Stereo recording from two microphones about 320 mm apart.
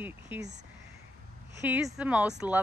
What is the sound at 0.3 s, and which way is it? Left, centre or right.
Speech, centre.